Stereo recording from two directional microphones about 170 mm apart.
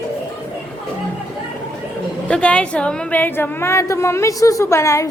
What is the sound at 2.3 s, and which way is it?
A woman's voice, 5° left (ahead or behind).